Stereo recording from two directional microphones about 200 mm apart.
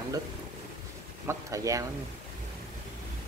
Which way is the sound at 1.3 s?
15° right (ahead or behind).